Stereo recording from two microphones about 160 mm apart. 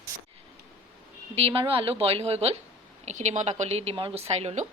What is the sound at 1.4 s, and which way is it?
A woman's voice, 35° right (ahead or behind).